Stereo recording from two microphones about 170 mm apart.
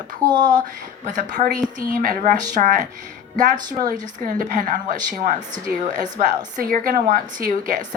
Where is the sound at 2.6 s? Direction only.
45° right (ahead or behind).